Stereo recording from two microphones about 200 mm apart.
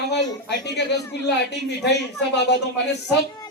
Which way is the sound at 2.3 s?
55° left (ahead or behind).